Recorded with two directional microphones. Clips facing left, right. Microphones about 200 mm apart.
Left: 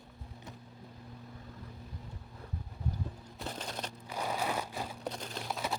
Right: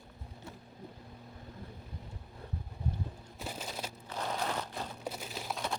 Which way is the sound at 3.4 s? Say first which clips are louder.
Left 1 dB; 5° right (ahead or behind).